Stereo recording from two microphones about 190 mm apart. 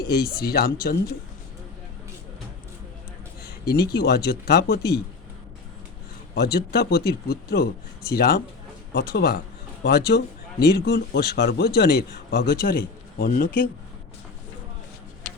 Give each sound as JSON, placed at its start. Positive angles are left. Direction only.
{"t": 0.0, "sound": "speech", "side_deg": 55}
{"t": 3.4, "sound": "speech", "side_deg": 55}
{"t": 6.3, "sound": "speech", "side_deg": 60}